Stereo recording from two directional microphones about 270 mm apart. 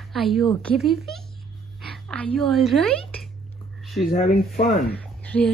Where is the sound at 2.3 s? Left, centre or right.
Centre.